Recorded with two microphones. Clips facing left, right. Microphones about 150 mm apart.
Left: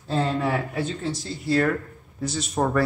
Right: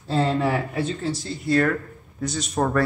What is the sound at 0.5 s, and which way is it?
Speech, centre (ahead or behind).